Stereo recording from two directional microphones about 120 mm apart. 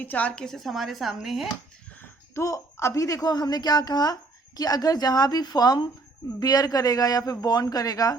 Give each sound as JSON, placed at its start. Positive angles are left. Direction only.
{"t": 0.0, "sound": "speech", "side_deg": 15}
{"t": 2.0, "sound": "a woman's voice", "side_deg": 25}